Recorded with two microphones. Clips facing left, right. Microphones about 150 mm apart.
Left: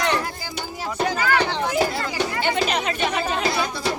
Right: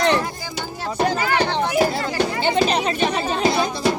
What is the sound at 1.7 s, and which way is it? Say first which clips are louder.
Chatter: right 3 dB; 25° right (ahead or behind).